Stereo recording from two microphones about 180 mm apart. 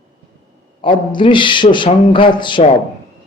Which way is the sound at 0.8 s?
30° left (ahead or behind).